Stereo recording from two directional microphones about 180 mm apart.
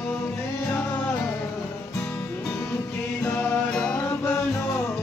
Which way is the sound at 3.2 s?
10° left (ahead or behind).